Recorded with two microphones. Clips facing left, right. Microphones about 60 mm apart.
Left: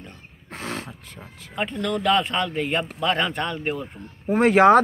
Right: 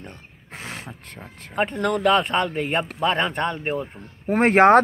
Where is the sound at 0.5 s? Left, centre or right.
Centre.